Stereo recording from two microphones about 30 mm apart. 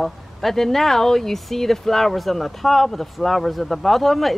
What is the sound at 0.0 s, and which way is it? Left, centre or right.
Speech, centre.